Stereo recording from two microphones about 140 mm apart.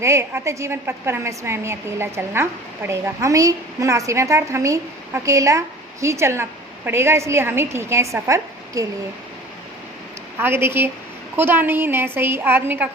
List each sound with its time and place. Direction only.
0.0 s a woman's voice: 20° right (ahead or behind)
10.3 s a woman's voice: 15° right (ahead or behind)